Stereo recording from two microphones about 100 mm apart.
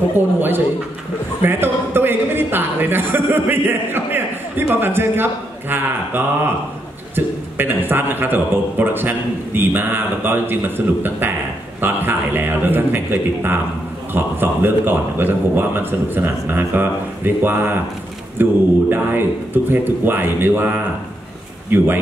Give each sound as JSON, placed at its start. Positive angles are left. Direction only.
{"t": 1.4, "sound": "speech", "side_deg": -20}